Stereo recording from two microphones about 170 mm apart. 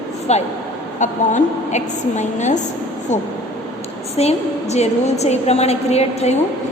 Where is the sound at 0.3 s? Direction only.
40° left (ahead or behind).